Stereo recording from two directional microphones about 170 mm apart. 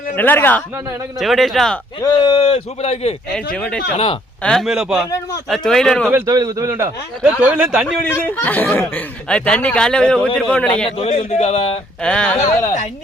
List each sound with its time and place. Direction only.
0.2 s speech: 10° left (ahead or behind)
1.2 s speech: centre (ahead or behind)
2.0 s speech: 25° left (ahead or behind)
3.3 s speech: 5° left (ahead or behind)
3.9 s speech: 35° left (ahead or behind)
4.4 s speech: centre (ahead or behind)
6.1 s a man's voice: 15° right (ahead or behind)
8.0 s speech: 10° left (ahead or behind)
10.9 s speech: 35° left (ahead or behind)
12.0 s speech: 5° left (ahead or behind)